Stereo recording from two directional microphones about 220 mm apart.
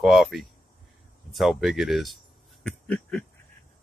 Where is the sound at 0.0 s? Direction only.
Centre (ahead or behind).